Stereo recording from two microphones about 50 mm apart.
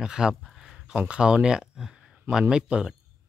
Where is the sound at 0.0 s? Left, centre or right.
Centre.